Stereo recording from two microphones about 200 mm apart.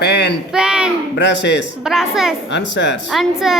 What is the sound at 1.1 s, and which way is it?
Speech, 60° left (ahead or behind).